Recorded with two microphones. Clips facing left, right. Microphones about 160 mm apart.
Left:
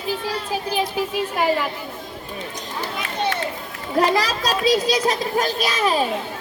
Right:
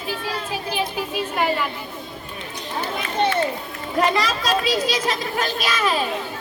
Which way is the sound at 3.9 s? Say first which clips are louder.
Left 2 dB; 35° left (ahead or behind).